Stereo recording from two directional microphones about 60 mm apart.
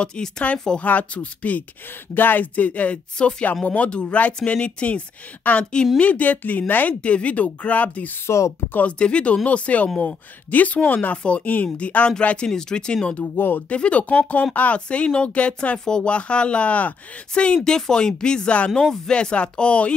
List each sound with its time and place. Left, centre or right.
0.0 s speech: centre
8.3 s speech: left
8.9 s speech: centre
13.1 s speech: left
13.7 s speech: left